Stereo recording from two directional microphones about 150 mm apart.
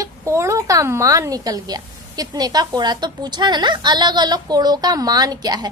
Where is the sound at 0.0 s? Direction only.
20° right (ahead or behind).